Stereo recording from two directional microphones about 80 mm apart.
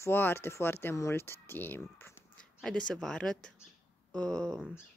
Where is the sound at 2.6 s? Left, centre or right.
Centre.